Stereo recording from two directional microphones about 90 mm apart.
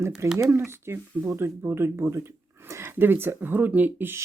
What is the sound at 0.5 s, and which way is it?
Speech, 30° right (ahead or behind).